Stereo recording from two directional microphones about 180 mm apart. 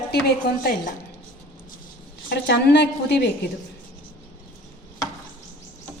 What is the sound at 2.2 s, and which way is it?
A woman's voice, 65° left (ahead or behind).